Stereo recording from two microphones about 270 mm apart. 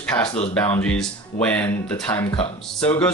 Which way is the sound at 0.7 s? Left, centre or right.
Centre.